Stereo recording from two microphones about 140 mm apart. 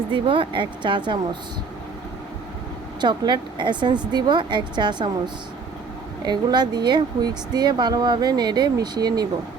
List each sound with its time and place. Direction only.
0.1 s speech: 35° right (ahead or behind)
3.0 s speech: 30° right (ahead or behind)